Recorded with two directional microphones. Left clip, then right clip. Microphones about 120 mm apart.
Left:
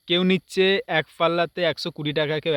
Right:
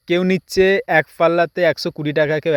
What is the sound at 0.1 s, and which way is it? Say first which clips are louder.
Speech: right 4 dB; 35° right (ahead or behind).